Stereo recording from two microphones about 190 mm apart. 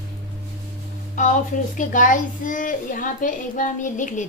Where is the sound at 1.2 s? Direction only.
45° left (ahead or behind).